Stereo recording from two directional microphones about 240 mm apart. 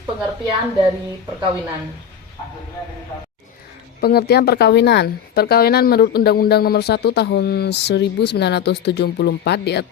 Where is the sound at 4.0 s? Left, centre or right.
Left.